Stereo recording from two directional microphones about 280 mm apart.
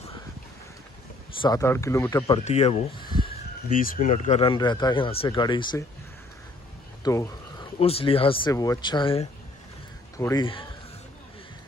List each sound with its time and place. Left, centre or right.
1.4 s speech: centre
2.4 s speech: left
3.6 s speech: left
7.0 s speech: centre